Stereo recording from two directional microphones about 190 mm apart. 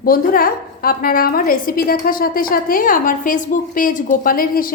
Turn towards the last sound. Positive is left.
turn(degrees=50)  # may be behind; listen again after turning